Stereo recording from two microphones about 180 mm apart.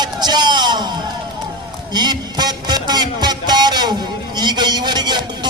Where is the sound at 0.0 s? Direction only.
25° right (ahead or behind).